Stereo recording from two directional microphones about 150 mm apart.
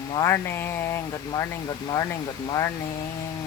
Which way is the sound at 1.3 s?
25° left (ahead or behind).